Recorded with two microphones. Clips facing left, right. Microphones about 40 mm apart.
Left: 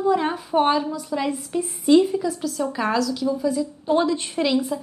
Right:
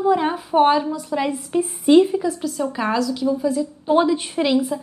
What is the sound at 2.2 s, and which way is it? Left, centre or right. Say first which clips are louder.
A woman's voice: right 2 dB; centre.